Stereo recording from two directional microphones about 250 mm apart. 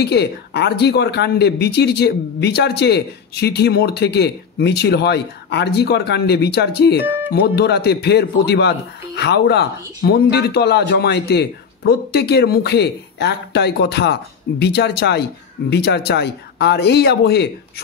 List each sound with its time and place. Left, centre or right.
0.0 s speech: left